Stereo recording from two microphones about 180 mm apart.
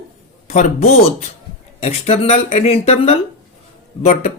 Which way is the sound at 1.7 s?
35° left (ahead or behind).